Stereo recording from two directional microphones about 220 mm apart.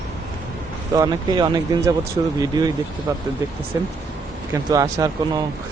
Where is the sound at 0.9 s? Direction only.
15° right (ahead or behind).